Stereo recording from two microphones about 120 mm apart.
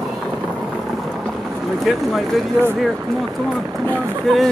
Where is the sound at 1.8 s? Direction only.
Centre (ahead or behind).